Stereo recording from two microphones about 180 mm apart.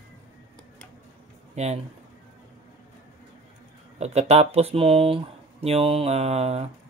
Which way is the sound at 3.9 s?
35° right (ahead or behind).